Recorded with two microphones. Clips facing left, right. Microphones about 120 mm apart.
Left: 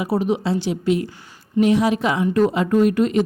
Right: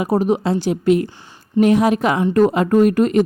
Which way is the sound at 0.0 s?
45° right (ahead or behind).